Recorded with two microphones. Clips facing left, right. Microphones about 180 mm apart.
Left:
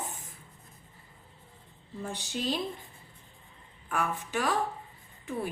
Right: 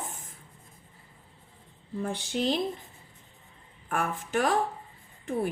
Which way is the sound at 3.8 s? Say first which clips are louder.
Right 1 dB; 50° right (ahead or behind).